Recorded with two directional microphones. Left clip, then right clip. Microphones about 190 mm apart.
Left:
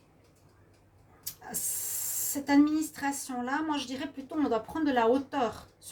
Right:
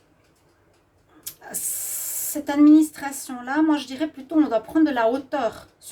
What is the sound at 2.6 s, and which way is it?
Speech, 45° right (ahead or behind).